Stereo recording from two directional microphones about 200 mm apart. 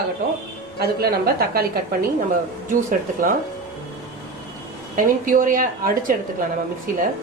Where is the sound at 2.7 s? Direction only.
40° right (ahead or behind).